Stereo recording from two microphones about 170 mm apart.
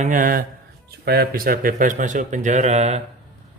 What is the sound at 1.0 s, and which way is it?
Speech, 70° right (ahead or behind).